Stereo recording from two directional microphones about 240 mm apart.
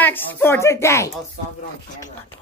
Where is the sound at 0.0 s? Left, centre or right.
Centre.